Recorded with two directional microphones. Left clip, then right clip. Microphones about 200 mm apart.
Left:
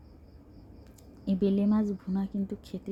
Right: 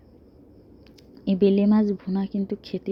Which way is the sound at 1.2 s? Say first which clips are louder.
Right 8 dB; 25° right (ahead or behind).